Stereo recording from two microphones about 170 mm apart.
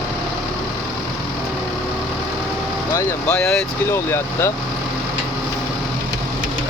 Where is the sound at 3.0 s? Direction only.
10° left (ahead or behind).